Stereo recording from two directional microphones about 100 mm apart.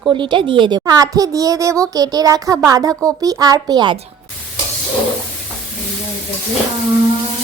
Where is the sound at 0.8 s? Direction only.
35° right (ahead or behind).